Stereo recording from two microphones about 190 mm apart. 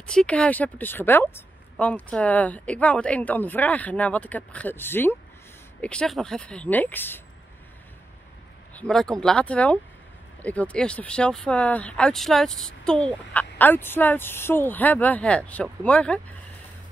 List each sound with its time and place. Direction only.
0.0 s speech: 5° left (ahead or behind)
8.7 s speech: 5° left (ahead or behind)